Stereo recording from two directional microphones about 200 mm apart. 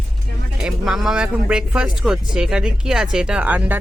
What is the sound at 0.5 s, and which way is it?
Speech, centre (ahead or behind).